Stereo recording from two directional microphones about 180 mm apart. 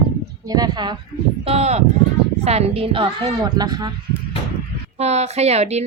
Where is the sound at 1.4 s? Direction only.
35° right (ahead or behind).